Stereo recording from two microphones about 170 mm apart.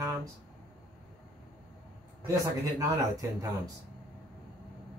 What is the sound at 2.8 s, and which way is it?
Speech, 20° right (ahead or behind).